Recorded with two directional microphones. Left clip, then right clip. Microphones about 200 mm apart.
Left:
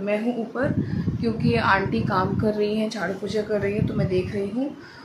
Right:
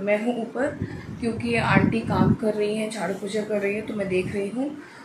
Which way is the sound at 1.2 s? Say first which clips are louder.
Left 2 dB; 15° left (ahead or behind).